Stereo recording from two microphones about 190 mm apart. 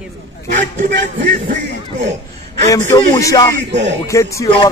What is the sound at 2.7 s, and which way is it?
Speech, 20° left (ahead or behind).